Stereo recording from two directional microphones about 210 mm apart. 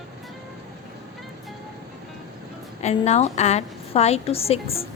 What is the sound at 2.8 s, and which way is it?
A woman's voice, 30° left (ahead or behind).